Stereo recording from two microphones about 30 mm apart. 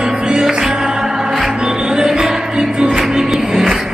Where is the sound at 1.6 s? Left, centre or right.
Right.